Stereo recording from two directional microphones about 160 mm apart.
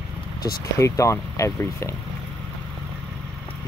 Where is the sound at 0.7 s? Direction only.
20° left (ahead or behind).